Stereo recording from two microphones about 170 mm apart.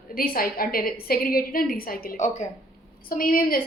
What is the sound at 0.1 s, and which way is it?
A woman's voice, 55° left (ahead or behind).